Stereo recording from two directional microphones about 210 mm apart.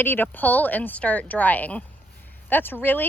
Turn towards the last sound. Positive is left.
turn(degrees=10)  # may be behind; listen again after turning